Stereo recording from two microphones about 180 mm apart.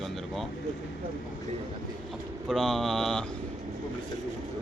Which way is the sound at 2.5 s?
Centre (ahead or behind).